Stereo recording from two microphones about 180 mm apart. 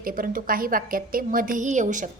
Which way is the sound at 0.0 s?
50° right (ahead or behind).